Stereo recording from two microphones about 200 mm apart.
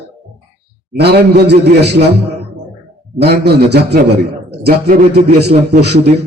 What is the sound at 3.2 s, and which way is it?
A man's voice, 55° right (ahead or behind).